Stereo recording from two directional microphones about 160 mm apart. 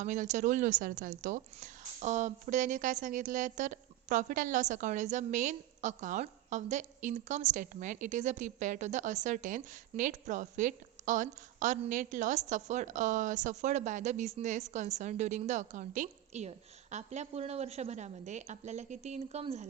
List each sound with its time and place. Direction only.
0.0 s a woman's voice: 50° right (ahead or behind)